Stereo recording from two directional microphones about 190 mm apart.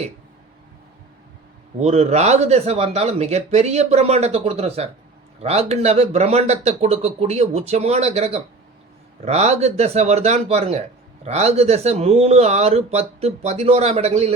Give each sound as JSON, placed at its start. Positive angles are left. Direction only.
{"t": 1.8, "sound": "a man's voice", "side_deg": -35}